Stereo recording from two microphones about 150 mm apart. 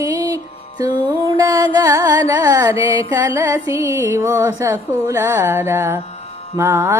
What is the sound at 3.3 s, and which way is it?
Speech, 20° right (ahead or behind).